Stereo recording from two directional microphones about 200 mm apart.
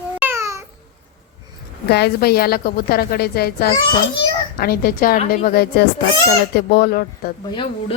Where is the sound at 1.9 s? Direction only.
55° left (ahead or behind).